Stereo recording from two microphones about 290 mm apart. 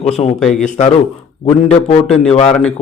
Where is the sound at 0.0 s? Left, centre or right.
Left.